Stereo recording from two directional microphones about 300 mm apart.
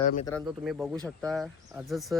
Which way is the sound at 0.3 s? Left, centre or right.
Centre.